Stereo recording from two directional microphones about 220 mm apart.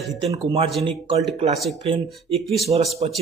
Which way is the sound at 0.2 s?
25° right (ahead or behind).